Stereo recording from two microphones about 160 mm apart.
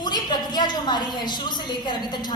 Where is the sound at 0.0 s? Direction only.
25° left (ahead or behind).